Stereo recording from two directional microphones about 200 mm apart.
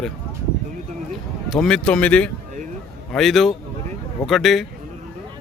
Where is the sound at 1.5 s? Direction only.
5° left (ahead or behind).